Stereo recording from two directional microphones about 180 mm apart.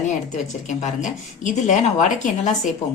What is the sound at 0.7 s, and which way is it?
A woman's voice, 45° left (ahead or behind).